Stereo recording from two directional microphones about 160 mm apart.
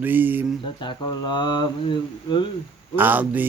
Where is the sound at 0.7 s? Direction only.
30° left (ahead or behind).